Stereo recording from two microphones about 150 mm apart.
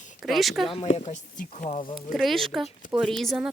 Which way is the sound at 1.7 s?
35° left (ahead or behind).